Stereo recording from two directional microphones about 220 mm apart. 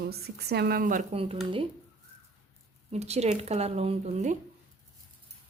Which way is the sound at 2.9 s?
30° right (ahead or behind).